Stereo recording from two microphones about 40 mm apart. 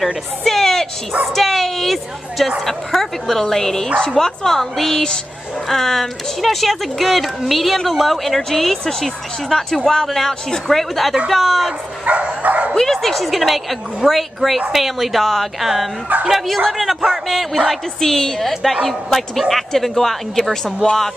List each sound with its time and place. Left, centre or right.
0.4 s a sound: centre
1.3 s speech: centre
12.1 s dog: right
12.7 s speech: centre